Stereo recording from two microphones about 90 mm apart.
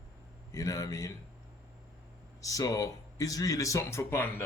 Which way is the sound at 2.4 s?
35° left (ahead or behind).